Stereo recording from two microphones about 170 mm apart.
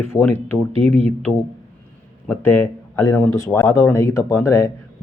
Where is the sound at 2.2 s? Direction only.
10° left (ahead or behind).